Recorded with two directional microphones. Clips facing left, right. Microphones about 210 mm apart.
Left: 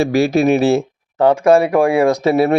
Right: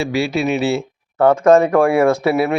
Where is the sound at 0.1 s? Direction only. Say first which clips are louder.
Left 5 dB; 45° left (ahead or behind).